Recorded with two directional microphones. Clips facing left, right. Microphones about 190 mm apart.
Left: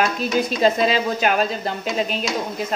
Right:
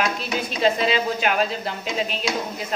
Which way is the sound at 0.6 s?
45° left (ahead or behind).